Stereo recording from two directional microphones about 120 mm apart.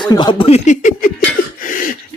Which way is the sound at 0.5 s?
90° left.